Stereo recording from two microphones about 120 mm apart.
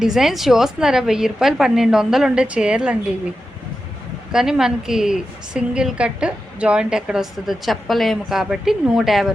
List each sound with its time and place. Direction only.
0.0 s a woman's voice: 5° right (ahead or behind)
4.3 s a woman's voice: 5° right (ahead or behind)